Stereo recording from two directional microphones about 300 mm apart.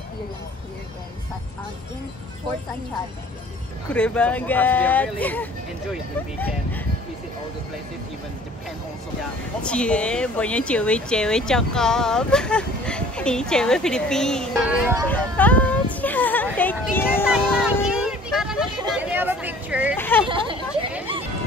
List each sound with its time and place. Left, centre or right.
3.9 s speech: centre
9.6 s speech: centre
15.0 s speech: centre
16.9 s a sound: centre
20.0 s speech: centre
20.2 s speech: centre